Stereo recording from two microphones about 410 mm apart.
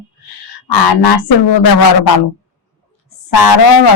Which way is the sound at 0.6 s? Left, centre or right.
Left.